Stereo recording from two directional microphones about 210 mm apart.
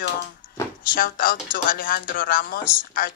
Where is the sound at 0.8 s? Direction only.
45° left (ahead or behind).